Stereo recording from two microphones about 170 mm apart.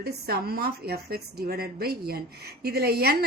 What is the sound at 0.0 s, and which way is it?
A woman's voice, 65° right (ahead or behind).